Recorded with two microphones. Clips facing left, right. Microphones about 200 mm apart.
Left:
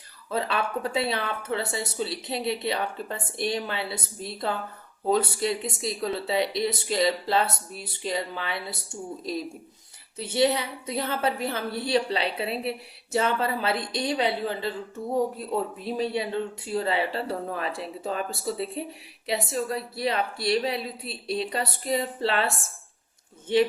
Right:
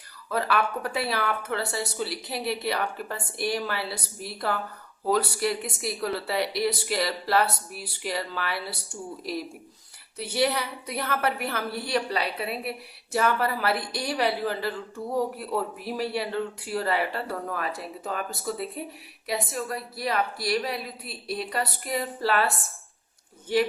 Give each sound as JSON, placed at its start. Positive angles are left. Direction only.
{"t": 0.3, "sound": "a woman's voice", "side_deg": 25}